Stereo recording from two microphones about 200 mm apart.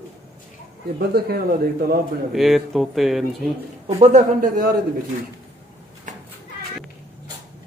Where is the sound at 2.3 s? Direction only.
Centre (ahead or behind).